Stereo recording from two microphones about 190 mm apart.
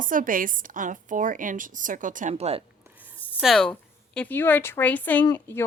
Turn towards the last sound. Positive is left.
turn(degrees=10)  # may be behind; listen again after turning